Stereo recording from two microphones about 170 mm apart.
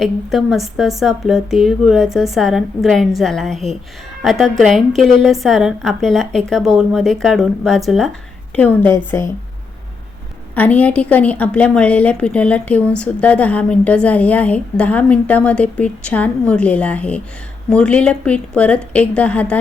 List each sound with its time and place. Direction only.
0.0 s a woman's voice: centre (ahead or behind); by 9.3 s 15° left (ahead or behind)
10.5 s a woman's voice: 10° left (ahead or behind)